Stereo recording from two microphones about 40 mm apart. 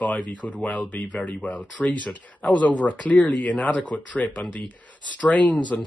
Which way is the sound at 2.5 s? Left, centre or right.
Left.